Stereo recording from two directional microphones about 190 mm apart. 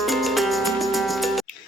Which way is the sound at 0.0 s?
Centre (ahead or behind).